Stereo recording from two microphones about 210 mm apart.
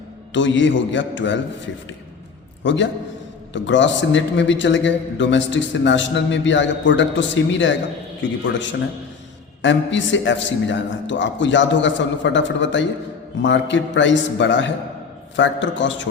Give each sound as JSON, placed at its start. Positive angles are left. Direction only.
{"t": 0.3, "sound": "a man's voice", "side_deg": 60}
{"t": 2.6, "sound": "a man's voice", "side_deg": 60}
{"t": 9.6, "sound": "a man's voice", "side_deg": 60}